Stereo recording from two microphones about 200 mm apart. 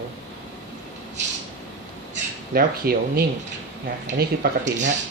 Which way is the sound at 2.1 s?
50° right (ahead or behind).